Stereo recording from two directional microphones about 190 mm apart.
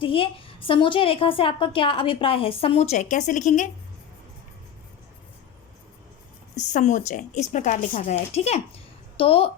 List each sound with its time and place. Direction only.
0.0 s a woman's voice: 30° left (ahead or behind)
6.6 s a woman's voice: 40° left (ahead or behind)